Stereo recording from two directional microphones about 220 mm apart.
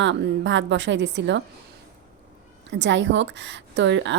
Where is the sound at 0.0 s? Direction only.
55° right (ahead or behind).